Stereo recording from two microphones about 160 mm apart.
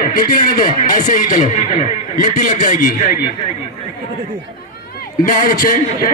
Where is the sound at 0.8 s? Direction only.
50° left (ahead or behind).